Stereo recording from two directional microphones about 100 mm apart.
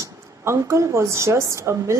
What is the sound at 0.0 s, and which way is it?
A woman's voice, 30° right (ahead or behind).